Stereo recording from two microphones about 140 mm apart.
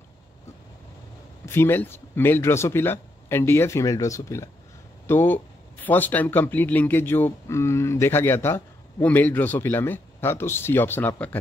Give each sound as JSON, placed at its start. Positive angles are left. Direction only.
{"t": 1.4, "sound": "speech", "side_deg": 15}